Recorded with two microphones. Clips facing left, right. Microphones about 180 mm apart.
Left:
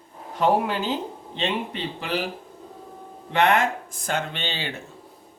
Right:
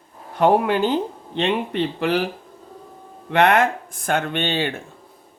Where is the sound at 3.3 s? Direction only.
65° right (ahead or behind).